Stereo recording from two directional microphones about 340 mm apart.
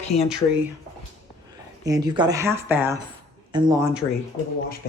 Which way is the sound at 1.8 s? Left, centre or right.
Centre.